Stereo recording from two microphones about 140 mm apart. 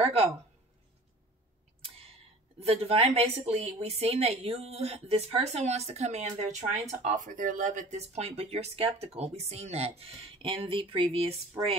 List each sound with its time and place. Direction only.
0.0 s speech: 45° right (ahead or behind)
2.6 s a woman's voice: 45° right (ahead or behind)